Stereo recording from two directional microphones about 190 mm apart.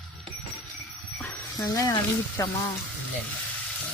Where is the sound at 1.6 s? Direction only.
20° left (ahead or behind).